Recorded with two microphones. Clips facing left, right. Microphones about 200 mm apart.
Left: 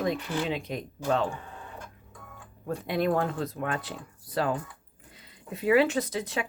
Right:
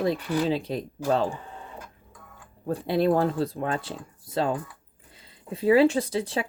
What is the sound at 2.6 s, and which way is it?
Speech, 30° right (ahead or behind).